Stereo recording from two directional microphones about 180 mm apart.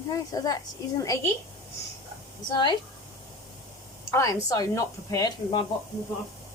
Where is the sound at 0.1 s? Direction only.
20° left (ahead or behind).